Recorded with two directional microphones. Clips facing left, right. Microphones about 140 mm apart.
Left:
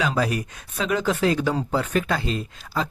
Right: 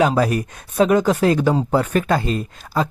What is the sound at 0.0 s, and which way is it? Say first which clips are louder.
Speech: right 7 dB; 45° right (ahead or behind).